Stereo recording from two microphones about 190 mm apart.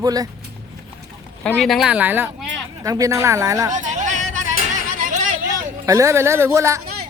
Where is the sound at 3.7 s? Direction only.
40° right (ahead or behind).